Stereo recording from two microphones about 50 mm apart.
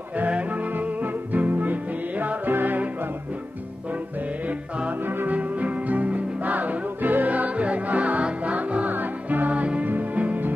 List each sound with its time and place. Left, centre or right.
0.3 s music: right
4.5 s music: right
5.0 s music: right